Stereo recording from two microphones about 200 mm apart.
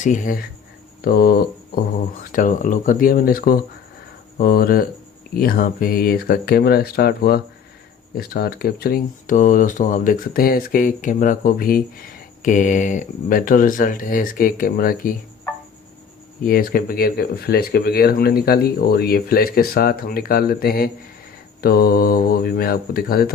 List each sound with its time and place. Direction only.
0.0 s speech: 40° left (ahead or behind)
16.4 s speech: 45° left (ahead or behind)